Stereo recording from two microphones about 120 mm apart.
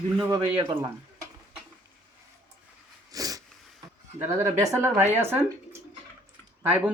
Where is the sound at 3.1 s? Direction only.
30° right (ahead or behind).